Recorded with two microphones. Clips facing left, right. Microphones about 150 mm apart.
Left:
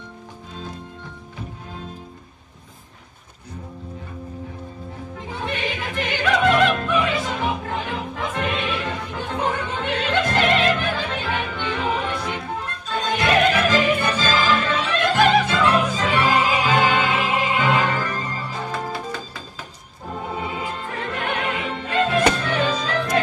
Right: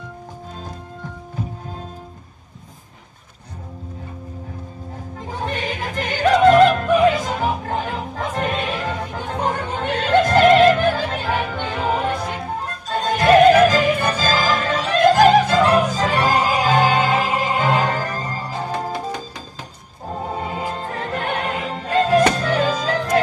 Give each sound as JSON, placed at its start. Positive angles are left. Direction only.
{"t": 0.6, "sound": "music", "side_deg": -45}
{"t": 5.2, "sound": "opera", "side_deg": -40}
{"t": 20.1, "sound": "music", "side_deg": -40}